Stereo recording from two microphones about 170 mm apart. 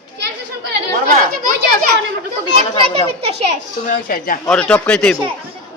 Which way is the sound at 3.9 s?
60° left (ahead or behind).